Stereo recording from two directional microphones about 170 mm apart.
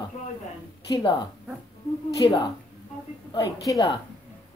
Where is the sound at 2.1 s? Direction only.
25° left (ahead or behind).